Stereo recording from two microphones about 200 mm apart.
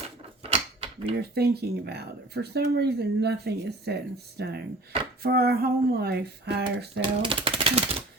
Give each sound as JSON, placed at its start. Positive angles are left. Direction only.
{"t": 0.4, "sound": "creak", "side_deg": -30}
{"t": 1.2, "sound": "speech", "side_deg": -55}
{"t": 7.0, "sound": "speech", "side_deg": -25}